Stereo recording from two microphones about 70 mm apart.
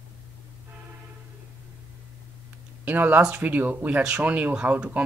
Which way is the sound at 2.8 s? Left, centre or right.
Right.